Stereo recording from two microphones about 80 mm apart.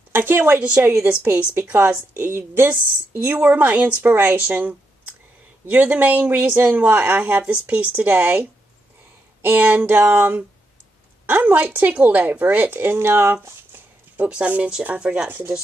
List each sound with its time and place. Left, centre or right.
0.1 s a woman's voice: right
0.6 s a woman's voice: centre; by 13.6 s right
14.1 s speech: centre